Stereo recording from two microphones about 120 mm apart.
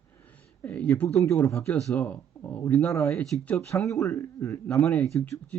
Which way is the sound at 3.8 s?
25° left (ahead or behind).